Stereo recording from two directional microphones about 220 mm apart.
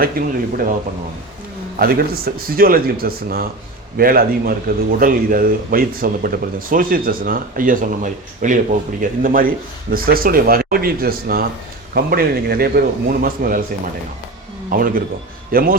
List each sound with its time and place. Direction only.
0.0 s a man's voice: 40° right (ahead or behind)
1.7 s a man's voice: 40° right (ahead or behind)
14.7 s speech: 40° right (ahead or behind)